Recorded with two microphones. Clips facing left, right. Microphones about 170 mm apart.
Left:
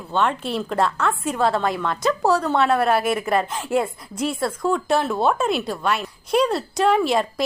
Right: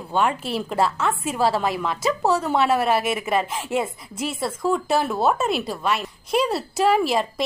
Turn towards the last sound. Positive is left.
turn(degrees=0)  # may be behind; listen again after turning